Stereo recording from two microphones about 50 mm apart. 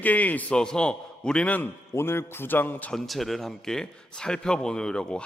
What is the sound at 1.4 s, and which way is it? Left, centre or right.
Speech, left.